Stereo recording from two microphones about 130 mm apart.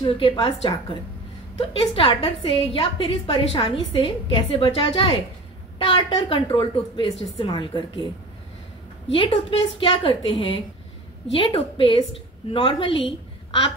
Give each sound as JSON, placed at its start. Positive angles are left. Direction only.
{"t": 0.0, "sound": "a woman's voice", "side_deg": 45}
{"t": 1.8, "sound": "a woman's voice", "side_deg": 45}
{"t": 9.1, "sound": "a woman's voice", "side_deg": 45}